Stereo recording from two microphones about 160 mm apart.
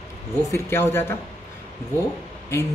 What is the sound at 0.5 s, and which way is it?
Speech, 15° left (ahead or behind).